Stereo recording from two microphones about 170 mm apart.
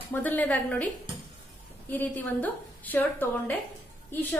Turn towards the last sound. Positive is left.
turn(degrees=10)  # may be behind; listen again after turning